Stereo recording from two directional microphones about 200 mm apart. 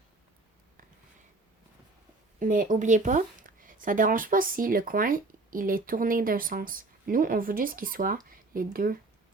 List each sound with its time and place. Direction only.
2.4 s speech: 40° right (ahead or behind)